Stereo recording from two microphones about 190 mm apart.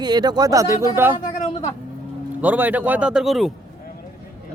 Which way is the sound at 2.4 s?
10° right (ahead or behind).